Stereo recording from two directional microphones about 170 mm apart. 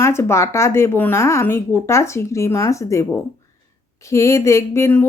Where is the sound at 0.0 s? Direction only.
15° left (ahead or behind).